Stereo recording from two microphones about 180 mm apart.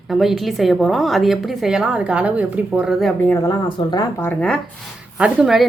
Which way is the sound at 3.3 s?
20° left (ahead or behind).